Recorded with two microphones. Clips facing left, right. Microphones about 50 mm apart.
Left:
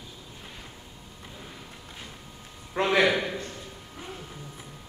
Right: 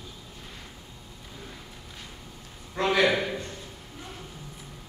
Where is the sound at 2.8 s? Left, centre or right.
Left.